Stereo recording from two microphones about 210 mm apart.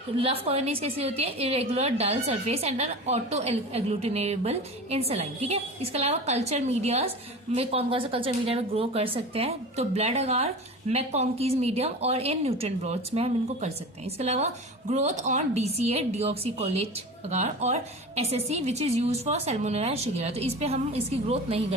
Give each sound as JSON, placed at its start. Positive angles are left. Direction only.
{"t": 0.2, "sound": "a woman's voice", "side_deg": -30}